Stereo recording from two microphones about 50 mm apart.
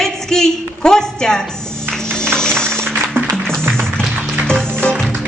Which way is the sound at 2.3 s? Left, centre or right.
Centre.